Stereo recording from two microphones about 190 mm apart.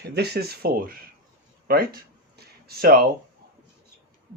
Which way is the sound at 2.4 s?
55° right (ahead or behind).